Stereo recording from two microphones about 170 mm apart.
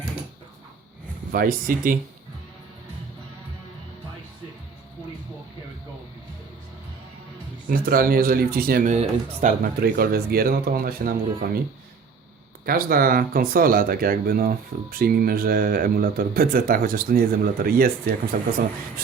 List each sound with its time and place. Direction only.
1.3 s speech: 60° right (ahead or behind)
7.7 s speech: 60° right (ahead or behind)
9.9 s speech: 65° right (ahead or behind)
12.6 s speech: 60° right (ahead or behind)